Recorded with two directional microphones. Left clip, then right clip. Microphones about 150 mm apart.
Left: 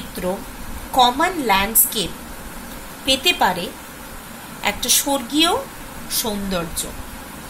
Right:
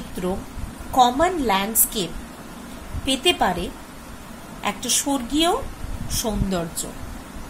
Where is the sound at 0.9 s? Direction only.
45° right (ahead or behind).